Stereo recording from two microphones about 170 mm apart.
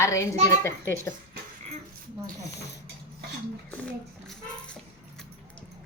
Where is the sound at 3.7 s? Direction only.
5° left (ahead or behind).